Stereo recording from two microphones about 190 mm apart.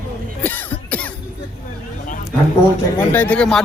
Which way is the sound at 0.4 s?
10° left (ahead or behind).